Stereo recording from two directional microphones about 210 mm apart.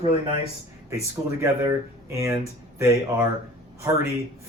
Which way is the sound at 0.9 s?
15° right (ahead or behind).